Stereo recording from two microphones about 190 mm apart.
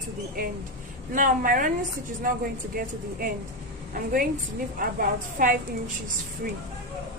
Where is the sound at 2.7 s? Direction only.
50° right (ahead or behind).